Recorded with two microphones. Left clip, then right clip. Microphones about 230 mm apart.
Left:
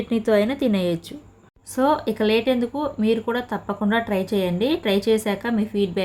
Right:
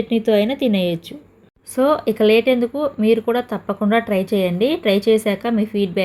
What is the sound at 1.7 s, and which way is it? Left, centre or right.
Speech, centre.